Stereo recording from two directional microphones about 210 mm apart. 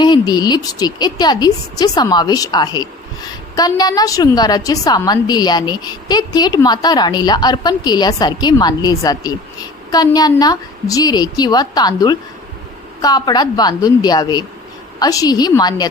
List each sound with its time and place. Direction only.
0.0 s a woman's voice: 20° left (ahead or behind)